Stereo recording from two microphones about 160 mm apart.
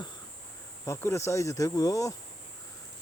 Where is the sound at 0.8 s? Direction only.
15° left (ahead or behind).